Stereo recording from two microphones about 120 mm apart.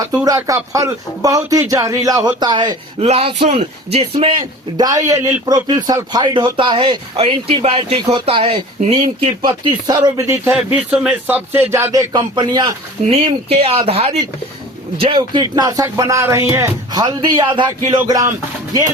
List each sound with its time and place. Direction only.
0.3 s speech: 30° right (ahead or behind)
3.0 s speech: 55° right (ahead or behind)
3.5 s speech: 65° right (ahead or behind)
4.8 s a man's voice: 30° right (ahead or behind); by 7.3 s 45° right (ahead or behind)
7.6 s a man's voice: 60° right (ahead or behind); by 10.0 s 40° right (ahead or behind)
10.2 s speech: 20° right (ahead or behind); by 12.7 s 35° right (ahead or behind)
13.1 s speech: 55° right (ahead or behind)
14.9 s a man's voice: 40° right (ahead or behind)